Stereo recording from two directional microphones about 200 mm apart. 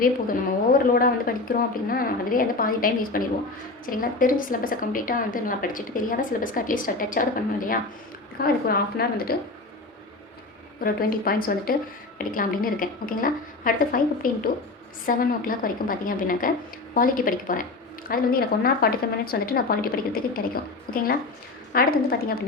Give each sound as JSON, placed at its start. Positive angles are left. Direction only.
{"t": 0.0, "sound": "a woman's voice", "side_deg": 45}
{"t": 10.8, "sound": "a woman's voice", "side_deg": 45}
{"t": 20.9, "sound": "a woman's voice", "side_deg": 50}